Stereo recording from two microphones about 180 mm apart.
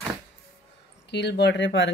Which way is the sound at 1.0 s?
70° left (ahead or behind).